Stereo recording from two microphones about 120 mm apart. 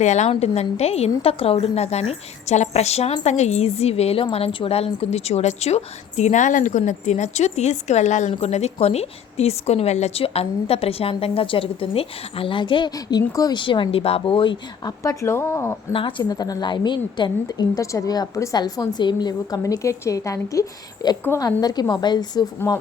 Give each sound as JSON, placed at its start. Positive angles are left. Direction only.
{"t": 0.0, "sound": "a woman's voice", "side_deg": 75}
{"t": 8.3, "sound": "a woman's voice", "side_deg": 65}
{"t": 15.0, "sound": "speech", "side_deg": 25}
{"t": 15.9, "sound": "a woman's voice", "side_deg": 45}
{"t": 16.3, "sound": "a woman's voice", "side_deg": 35}